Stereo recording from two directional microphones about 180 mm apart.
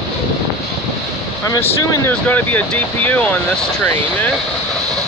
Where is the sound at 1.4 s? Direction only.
20° left (ahead or behind).